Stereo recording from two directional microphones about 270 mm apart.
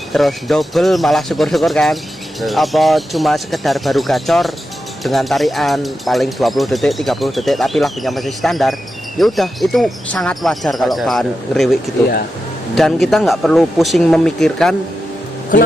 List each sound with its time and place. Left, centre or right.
0.1 s speech: centre
12.7 s speech: centre
15.5 s speech: left